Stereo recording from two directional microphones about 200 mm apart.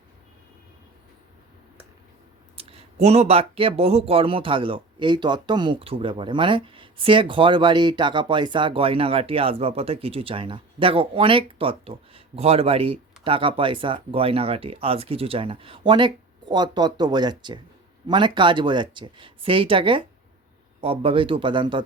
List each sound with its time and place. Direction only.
2.6 s speech: 30° right (ahead or behind)